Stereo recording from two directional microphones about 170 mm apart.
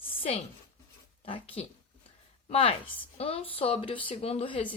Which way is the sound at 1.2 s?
35° left (ahead or behind).